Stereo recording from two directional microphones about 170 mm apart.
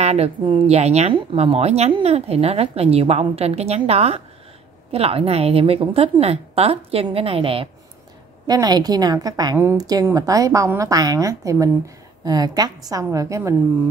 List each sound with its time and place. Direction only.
0.0 s speech: 40° right (ahead or behind)
8.5 s a woman's voice: 25° right (ahead or behind)